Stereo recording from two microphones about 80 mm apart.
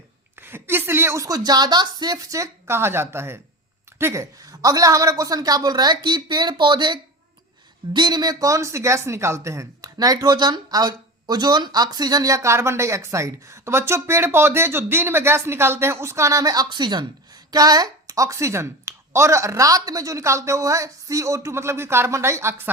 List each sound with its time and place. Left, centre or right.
0.3 s a sound: right
1.2 s a woman's voice: right
7.9 s speech: right